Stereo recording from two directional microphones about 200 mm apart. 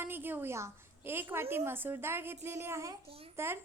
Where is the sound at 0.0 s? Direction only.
10° right (ahead or behind).